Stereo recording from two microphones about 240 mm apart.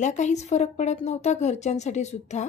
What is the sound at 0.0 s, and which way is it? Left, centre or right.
A woman's voice, left.